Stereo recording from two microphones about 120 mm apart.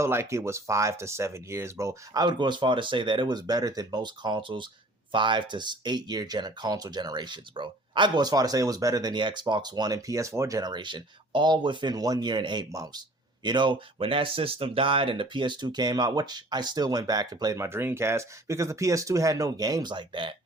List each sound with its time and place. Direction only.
0.0 s speech: 20° right (ahead or behind)
2.2 s speech: 40° right (ahead or behind)